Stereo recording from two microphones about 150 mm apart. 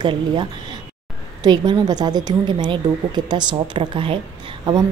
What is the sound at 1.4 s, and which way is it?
A woman's voice, 30° right (ahead or behind).